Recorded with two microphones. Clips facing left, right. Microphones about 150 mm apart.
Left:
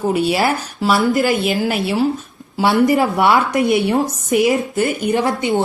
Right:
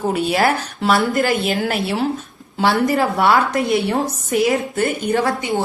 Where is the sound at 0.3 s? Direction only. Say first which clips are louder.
Even; centre (ahead or behind).